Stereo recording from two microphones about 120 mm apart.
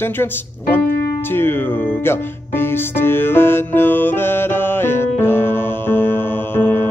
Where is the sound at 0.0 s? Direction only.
20° left (ahead or behind).